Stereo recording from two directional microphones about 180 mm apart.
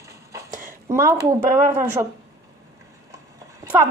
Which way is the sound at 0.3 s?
15° right (ahead or behind).